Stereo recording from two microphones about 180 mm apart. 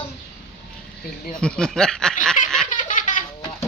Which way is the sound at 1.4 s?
5° left (ahead or behind).